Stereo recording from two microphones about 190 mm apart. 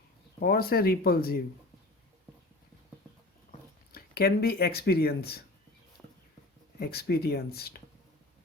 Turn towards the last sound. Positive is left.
turn(degrees=55)  # may be behind; listen again after turning